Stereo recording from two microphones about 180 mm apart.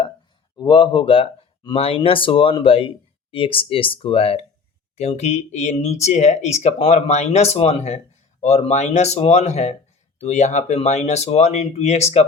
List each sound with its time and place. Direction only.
0.5 s speech: 25° left (ahead or behind)